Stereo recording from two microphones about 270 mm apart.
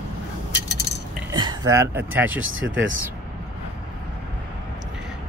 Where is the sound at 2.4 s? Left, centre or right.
Right.